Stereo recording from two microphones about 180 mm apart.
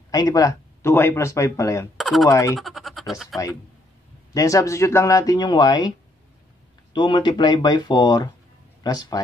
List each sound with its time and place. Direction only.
0.1 s speech: 20° left (ahead or behind)
2.0 s a sound: centre (ahead or behind)
2.2 s speech: 15° left (ahead or behind)
2.5 s speech: centre (ahead or behind)
4.3 s speech: 20° left (ahead or behind)